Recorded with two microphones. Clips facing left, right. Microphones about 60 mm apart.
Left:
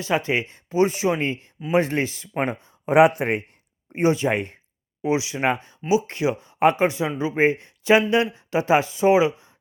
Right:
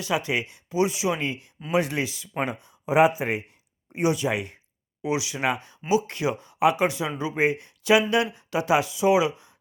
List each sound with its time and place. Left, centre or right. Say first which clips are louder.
0.0 s speech: left 3 dB; left
2.9 s speech: left 4 dB; left
3.9 s speech: left 4 dB; left
5.0 s speech: left 4 dB; left